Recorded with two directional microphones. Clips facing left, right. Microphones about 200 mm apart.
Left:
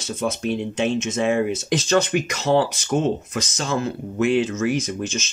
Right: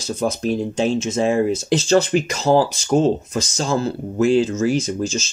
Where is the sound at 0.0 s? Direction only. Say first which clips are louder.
Right 3 dB; 35° right (ahead or behind).